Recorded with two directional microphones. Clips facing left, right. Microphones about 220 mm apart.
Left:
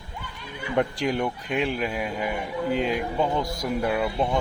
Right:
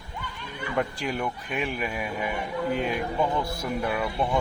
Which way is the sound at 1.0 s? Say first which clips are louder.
Left 4 dB; 15° left (ahead or behind).